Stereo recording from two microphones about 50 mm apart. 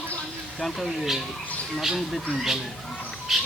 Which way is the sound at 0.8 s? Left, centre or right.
Centre.